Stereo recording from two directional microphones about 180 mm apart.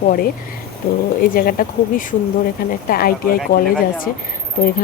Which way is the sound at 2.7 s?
55° left (ahead or behind).